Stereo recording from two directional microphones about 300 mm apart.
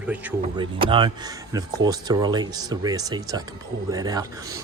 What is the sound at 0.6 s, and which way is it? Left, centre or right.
Speech, centre.